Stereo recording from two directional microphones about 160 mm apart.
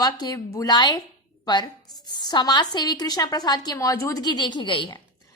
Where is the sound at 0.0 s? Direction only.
25° left (ahead or behind).